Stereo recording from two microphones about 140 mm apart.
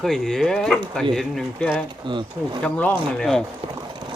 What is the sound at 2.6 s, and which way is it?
Speech, 10° left (ahead or behind).